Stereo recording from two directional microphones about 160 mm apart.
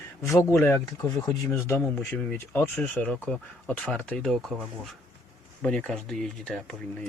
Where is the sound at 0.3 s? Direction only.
15° left (ahead or behind).